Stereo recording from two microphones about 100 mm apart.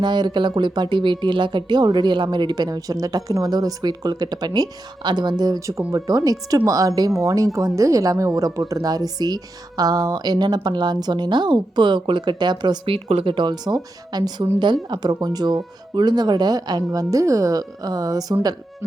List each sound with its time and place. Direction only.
0.0 s a woman's voice: 50° right (ahead or behind)
12.8 s speech: 80° right
13.3 s a woman's voice: 50° right (ahead or behind)